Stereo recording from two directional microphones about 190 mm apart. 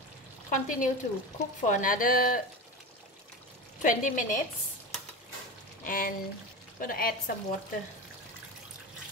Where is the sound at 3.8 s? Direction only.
45° left (ahead or behind).